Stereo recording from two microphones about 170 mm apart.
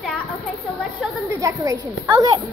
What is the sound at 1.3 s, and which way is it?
A woman's voice, 20° right (ahead or behind).